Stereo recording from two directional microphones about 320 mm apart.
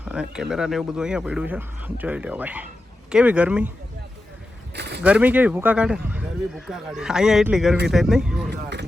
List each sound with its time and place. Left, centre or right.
0.0 s speech: centre
4.7 s a sound: right
5.0 s speech: centre